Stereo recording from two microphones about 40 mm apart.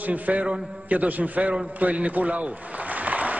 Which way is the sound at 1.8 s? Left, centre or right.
Right.